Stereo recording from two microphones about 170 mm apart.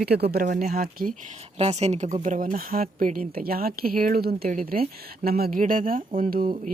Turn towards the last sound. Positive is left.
turn(degrees=-55)  # may be behind; listen again after turning